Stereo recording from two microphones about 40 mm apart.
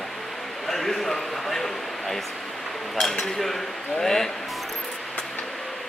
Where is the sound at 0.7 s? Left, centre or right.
Centre.